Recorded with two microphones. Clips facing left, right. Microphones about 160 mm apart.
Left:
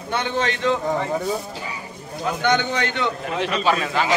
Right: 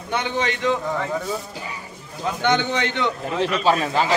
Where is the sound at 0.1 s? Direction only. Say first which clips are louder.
Even; 15° right (ahead or behind).